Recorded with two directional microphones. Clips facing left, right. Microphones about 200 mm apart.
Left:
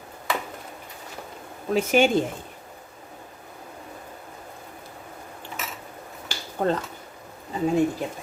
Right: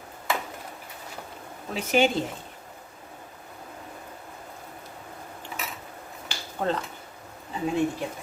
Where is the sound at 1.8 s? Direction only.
50° left (ahead or behind).